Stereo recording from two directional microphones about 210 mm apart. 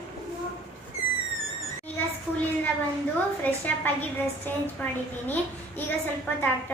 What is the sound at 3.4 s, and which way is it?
A woman's voice, 10° left (ahead or behind).